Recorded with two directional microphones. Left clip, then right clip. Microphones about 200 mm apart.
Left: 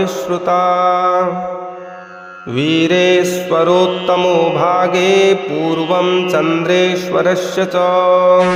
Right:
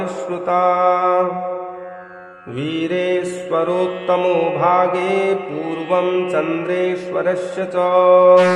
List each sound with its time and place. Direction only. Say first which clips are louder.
0.0 s mantra: left 6 dB; 25° left (ahead or behind)
2.6 s mantra: left 8 dB; 30° left (ahead or behind)